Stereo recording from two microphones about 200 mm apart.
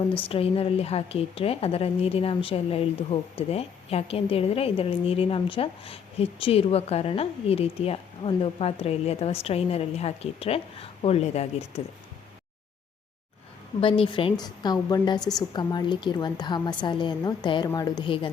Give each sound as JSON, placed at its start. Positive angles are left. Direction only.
{"t": 0.2, "sound": "a woman's voice", "side_deg": 30}
{"t": 13.8, "sound": "a woman's voice", "side_deg": 25}